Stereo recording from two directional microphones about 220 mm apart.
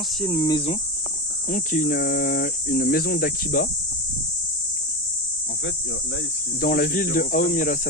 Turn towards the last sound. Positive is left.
turn(degrees=40)  # may be behind; listen again after turning